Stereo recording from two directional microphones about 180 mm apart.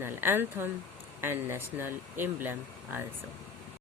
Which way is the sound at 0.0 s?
10° right (ahead or behind).